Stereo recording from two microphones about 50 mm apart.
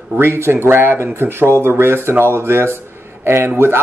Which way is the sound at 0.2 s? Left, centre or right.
Right.